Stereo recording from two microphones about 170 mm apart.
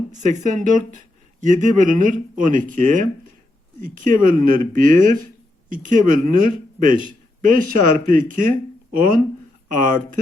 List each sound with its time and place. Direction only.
0.2 s speech: 45° right (ahead or behind)